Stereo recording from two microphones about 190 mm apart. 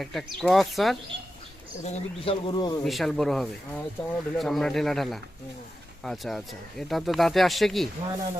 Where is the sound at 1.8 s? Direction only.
30° left (ahead or behind).